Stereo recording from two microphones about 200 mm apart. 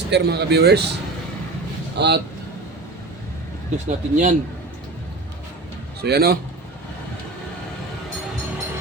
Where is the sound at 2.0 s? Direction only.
55° right (ahead or behind).